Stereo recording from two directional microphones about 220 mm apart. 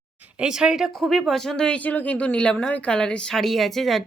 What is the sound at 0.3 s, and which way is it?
Speech, 5° right (ahead or behind).